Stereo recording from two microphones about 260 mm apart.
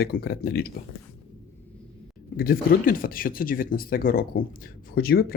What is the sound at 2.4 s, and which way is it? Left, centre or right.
Speech, left.